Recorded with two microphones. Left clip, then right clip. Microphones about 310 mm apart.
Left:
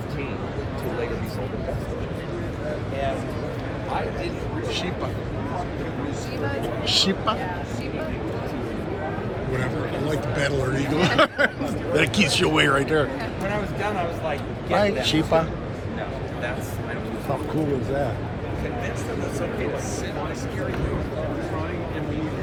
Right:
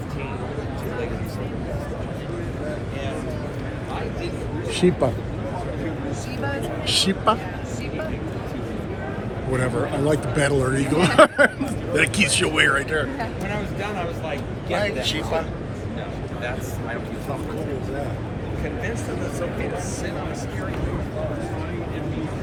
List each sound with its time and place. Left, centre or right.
6.8 s speech: centre
10.1 s speech: centre
14.3 s speech: centre